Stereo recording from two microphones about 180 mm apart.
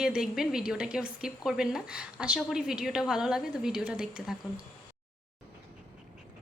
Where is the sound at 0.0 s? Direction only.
5° right (ahead or behind).